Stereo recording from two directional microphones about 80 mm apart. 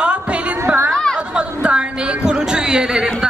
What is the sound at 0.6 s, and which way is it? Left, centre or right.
Chatter, right.